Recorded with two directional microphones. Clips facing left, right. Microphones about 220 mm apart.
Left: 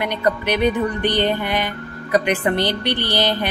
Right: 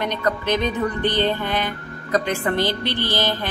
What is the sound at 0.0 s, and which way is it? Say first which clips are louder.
Speech: left 2 dB; 10° left (ahead or behind).